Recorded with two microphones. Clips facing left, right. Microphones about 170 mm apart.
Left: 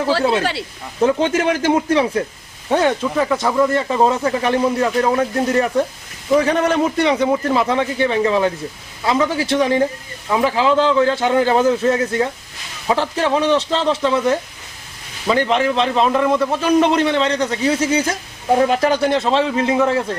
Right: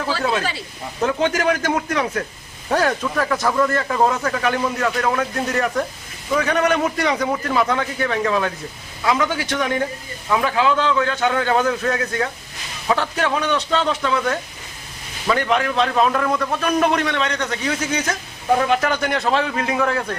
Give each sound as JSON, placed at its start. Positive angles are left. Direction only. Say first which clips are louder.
{"t": 0.1, "sound": "a man's voice", "louder": "left 4 dB", "side_deg": 30}